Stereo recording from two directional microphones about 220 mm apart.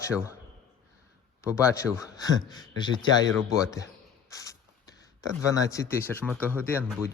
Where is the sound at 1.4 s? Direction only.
15° left (ahead or behind).